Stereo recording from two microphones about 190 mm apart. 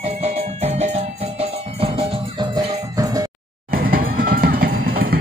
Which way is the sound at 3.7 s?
50° right (ahead or behind).